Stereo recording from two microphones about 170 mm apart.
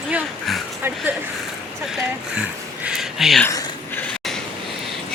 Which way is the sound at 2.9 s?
Centre (ahead or behind).